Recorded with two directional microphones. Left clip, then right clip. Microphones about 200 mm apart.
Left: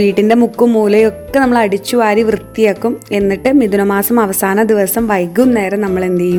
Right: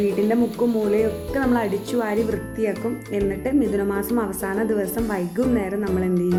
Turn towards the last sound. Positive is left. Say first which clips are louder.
# left 9 dB
turn(degrees=45)  # may be behind; listen again after turning